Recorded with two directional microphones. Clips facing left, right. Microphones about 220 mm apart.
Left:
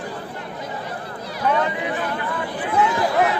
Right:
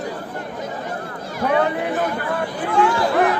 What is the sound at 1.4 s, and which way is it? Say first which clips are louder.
Speech: right 3 dB; 50° right (ahead or behind).